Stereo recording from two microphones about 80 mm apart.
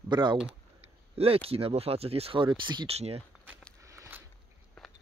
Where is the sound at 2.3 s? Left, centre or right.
Right.